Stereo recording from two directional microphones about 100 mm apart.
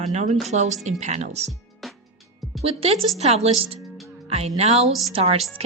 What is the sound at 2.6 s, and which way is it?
Speech, 85° right.